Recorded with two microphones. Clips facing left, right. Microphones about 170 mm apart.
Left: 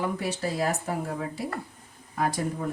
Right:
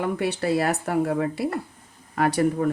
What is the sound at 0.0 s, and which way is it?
Speech, 65° right (ahead or behind).